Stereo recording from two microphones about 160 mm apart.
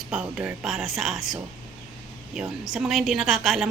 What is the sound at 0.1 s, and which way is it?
A woman's voice, 5° right (ahead or behind).